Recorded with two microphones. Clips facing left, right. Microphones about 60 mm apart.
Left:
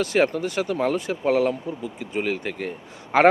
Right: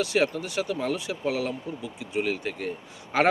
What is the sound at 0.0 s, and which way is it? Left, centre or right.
Speech, left.